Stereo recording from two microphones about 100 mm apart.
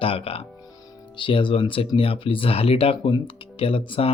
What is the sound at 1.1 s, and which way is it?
Speech, 55° left (ahead or behind).